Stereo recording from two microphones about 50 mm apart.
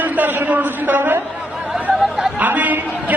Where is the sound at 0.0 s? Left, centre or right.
Right.